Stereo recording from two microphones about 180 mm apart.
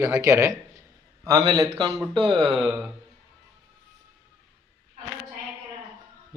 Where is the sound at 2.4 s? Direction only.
Centre (ahead or behind).